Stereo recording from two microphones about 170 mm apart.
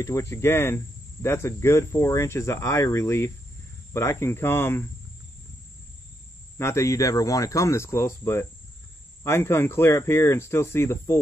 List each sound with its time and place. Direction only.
0.0 s speech: 15° left (ahead or behind)
6.6 s speech: 15° left (ahead or behind)